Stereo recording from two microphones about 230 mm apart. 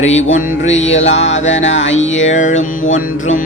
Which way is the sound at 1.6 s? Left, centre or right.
Left.